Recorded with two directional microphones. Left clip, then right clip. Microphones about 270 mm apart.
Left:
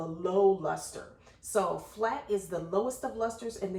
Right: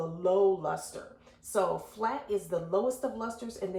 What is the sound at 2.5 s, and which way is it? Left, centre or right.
Speech, centre.